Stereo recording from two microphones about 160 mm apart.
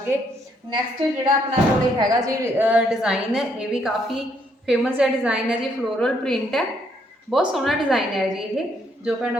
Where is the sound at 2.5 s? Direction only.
10° right (ahead or behind).